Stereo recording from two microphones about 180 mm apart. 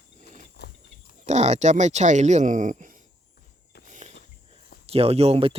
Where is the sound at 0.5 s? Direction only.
60° left (ahead or behind).